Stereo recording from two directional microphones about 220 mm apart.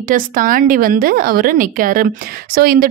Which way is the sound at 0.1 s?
40° right (ahead or behind).